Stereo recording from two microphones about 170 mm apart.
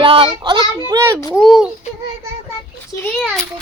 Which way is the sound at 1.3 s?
Centre (ahead or behind).